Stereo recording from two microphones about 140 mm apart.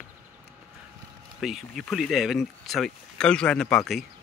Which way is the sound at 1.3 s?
Centre (ahead or behind).